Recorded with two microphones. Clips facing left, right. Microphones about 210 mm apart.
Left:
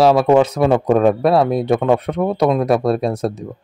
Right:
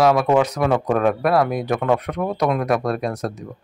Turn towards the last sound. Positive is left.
turn(degrees=25)  # may be behind; listen again after turning